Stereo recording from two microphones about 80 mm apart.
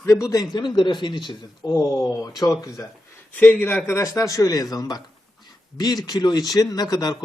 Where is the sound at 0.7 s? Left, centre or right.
Left.